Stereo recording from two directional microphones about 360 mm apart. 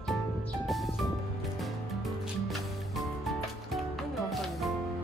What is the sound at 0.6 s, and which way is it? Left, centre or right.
Music, centre.